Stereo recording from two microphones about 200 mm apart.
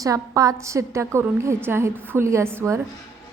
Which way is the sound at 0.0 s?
15° right (ahead or behind).